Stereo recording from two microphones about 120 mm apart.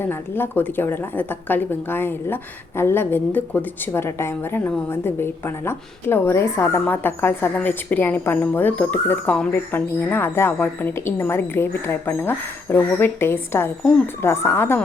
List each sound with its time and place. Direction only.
0.1 s a woman's voice: 15° left (ahead or behind)